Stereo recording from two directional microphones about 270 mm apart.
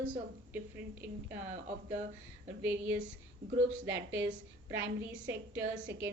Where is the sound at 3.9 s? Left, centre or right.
Right.